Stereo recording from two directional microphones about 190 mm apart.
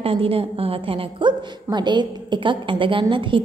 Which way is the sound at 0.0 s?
30° right (ahead or behind).